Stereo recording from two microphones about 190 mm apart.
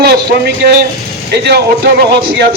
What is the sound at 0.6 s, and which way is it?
A man's voice, 50° right (ahead or behind).